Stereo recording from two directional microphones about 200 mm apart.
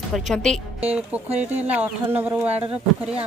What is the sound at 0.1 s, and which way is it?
A woman's voice, centre (ahead or behind).